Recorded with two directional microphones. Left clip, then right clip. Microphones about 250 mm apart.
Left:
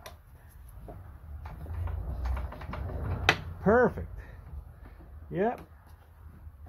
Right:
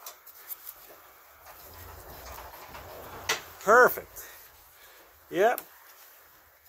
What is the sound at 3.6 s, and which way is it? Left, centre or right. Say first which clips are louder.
Speech: right 5 dB; right.